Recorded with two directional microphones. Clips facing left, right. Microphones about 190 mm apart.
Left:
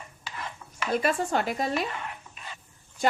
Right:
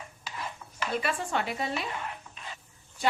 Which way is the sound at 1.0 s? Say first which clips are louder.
Left 5 dB; 40° left (ahead or behind).